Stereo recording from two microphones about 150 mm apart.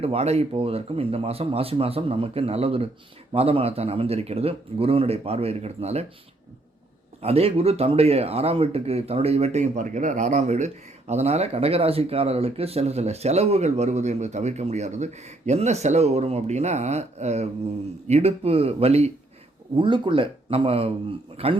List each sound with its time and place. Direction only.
0.0 s speech: 45° right (ahead or behind)
7.2 s speech: 45° right (ahead or behind)